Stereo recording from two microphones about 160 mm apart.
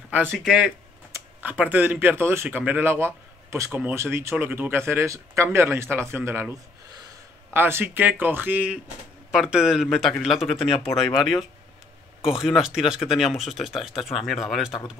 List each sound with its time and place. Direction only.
0.3 s speech: centre (ahead or behind)
12.2 s speech: 5° right (ahead or behind)